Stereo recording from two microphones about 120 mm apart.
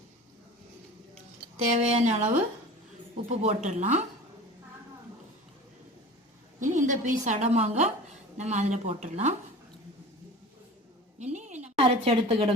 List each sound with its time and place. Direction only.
1.7 s speech: 75° right (ahead or behind)
6.6 s a woman's voice: 90° right; by 9.3 s 65° right (ahead or behind)
11.2 s a sound: 80° right
11.8 s a woman's voice: 55° right (ahead or behind)